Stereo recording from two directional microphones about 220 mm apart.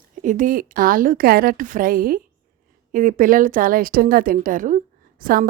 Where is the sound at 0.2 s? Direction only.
35° right (ahead or behind).